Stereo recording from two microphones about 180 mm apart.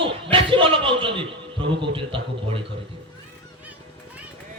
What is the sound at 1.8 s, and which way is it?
Speech, 30° right (ahead or behind).